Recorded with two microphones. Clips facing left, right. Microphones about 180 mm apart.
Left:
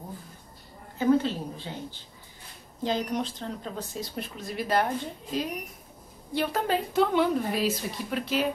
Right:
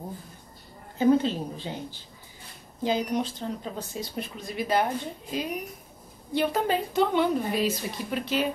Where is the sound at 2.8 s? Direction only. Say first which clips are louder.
Right 2 dB; 5° right (ahead or behind).